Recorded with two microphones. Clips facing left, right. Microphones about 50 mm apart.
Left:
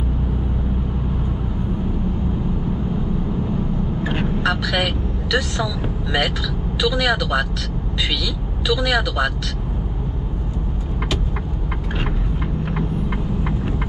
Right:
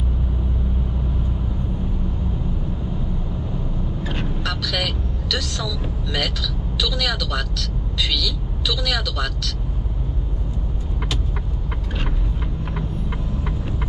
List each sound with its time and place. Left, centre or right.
4.0 s vehicle: left
6.8 s speech: left